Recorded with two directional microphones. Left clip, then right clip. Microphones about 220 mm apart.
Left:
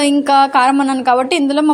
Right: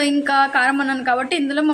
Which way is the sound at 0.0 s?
20° left (ahead or behind).